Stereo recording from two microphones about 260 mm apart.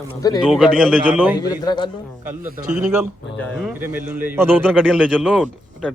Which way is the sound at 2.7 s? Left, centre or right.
Centre.